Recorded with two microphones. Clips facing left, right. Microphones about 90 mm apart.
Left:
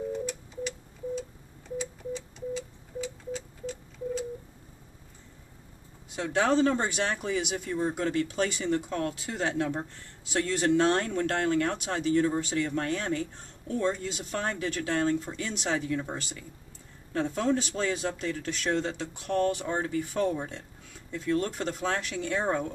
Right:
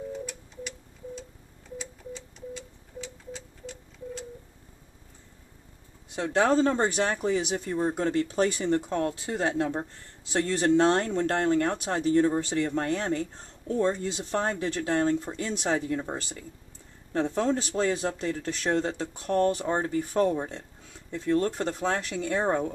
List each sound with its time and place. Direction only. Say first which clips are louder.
0.1 s tick-tock: left 4 dB; centre (ahead or behind)
1.8 s a sound: left 6 dB; 5° left (ahead or behind)
6.6 s speech: right 2 dB; 25° right (ahead or behind)
19.6 s speech: right 3 dB; 30° right (ahead or behind)
20.3 s speech: right 3 dB; 20° right (ahead or behind)